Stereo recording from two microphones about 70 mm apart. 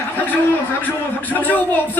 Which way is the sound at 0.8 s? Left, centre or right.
Left.